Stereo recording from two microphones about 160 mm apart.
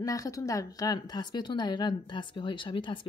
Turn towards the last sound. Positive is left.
turn(degrees=30)  # may be behind; listen again after turning